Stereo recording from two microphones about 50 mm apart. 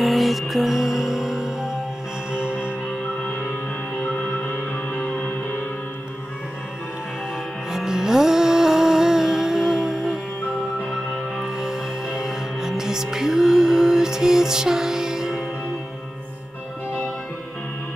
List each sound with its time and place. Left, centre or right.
0.0 s music: centre
4.0 s music: left
7.7 s music: centre
11.4 s music: centre